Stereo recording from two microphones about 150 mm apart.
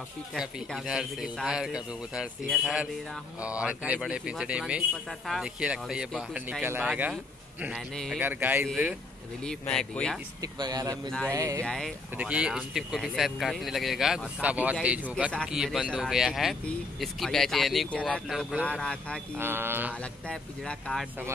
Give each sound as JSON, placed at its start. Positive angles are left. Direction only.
{"t": 0.3, "sound": "a man's voice", "side_deg": 0}
{"t": 7.9, "sound": "speech", "side_deg": 5}
{"t": 8.2, "sound": "a man's voice", "side_deg": -10}
{"t": 8.6, "sound": "speech", "side_deg": 0}
{"t": 10.4, "sound": "speech", "side_deg": -25}
{"t": 11.1, "sound": "speech", "side_deg": 5}
{"t": 11.3, "sound": "speech", "side_deg": -20}
{"t": 11.6, "sound": "speech", "side_deg": 5}
{"t": 12.2, "sound": "speech", "side_deg": -5}
{"t": 19.3, "sound": "a man's voice", "side_deg": -15}
{"t": 20.0, "sound": "speech", "side_deg": 5}